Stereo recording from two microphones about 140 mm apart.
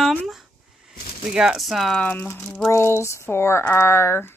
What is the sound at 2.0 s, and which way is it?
Speech, 10° left (ahead or behind).